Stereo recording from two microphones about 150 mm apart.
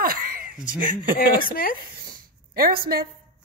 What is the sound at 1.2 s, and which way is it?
Speech, 75° left (ahead or behind).